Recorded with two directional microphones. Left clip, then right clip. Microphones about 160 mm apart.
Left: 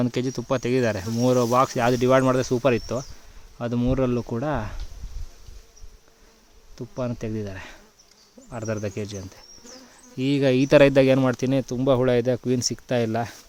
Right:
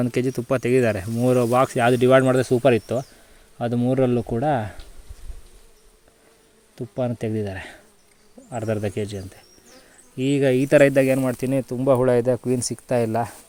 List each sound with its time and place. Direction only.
0.0 s speech: 5° right (ahead or behind)
6.7 s speech: 5° right (ahead or behind)
10.2 s speech: 5° left (ahead or behind)